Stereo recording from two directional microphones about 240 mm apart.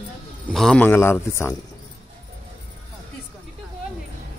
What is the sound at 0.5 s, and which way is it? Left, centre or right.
Speech, centre.